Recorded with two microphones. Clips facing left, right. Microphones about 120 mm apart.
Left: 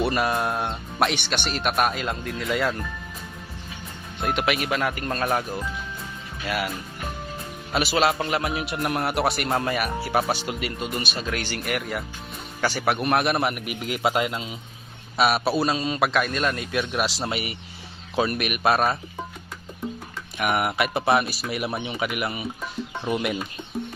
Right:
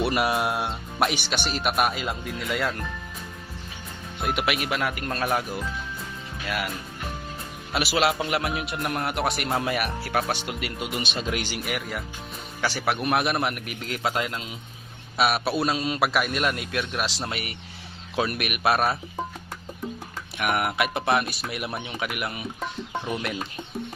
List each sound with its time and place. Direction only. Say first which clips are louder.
0.0 s speech: even; 10° right (ahead or behind)
4.2 s speech: left 2 dB; 5° right (ahead or behind)
7.7 s speech: left 2 dB; centre (ahead or behind)
11.1 s speech: even; 20° right (ahead or behind)
11.6 s speech: left 3 dB; centre (ahead or behind)
20.4 s speech: left 1 dB; centre (ahead or behind)